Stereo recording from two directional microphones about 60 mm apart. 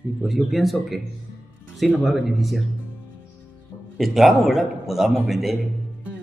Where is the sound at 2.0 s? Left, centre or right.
Centre.